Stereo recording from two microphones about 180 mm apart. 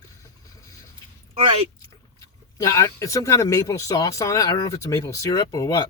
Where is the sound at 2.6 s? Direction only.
15° left (ahead or behind).